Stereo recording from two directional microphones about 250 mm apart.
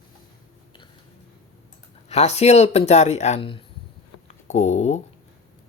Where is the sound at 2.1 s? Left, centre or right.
Left.